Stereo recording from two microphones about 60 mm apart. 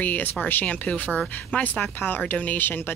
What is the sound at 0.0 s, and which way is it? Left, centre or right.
Speech, left.